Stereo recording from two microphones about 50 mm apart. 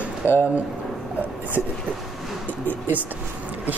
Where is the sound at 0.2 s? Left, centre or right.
Left.